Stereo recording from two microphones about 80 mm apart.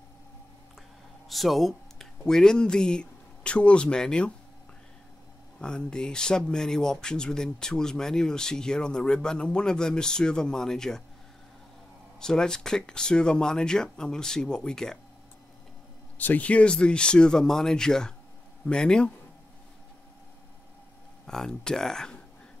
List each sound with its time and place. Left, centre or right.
1.3 s speech: centre
5.6 s speech: centre
12.2 s speech: centre
16.2 s speech: centre
21.3 s speech: centre